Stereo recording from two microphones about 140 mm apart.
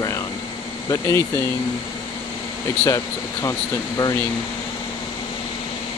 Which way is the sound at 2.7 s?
20° left (ahead or behind).